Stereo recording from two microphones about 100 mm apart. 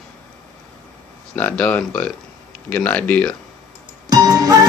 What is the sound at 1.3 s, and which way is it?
Speech, 15° left (ahead or behind).